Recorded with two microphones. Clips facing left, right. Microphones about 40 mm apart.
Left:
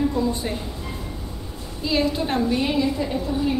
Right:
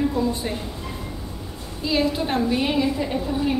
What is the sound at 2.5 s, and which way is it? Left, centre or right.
A woman's voice, centre.